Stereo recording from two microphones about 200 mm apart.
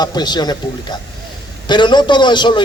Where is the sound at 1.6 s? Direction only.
20° left (ahead or behind).